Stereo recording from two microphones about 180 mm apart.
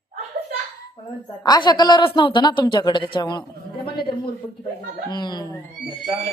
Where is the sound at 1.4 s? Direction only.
20° left (ahead or behind).